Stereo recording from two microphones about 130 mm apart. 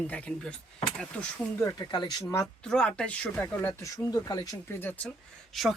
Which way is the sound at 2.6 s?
5° left (ahead or behind).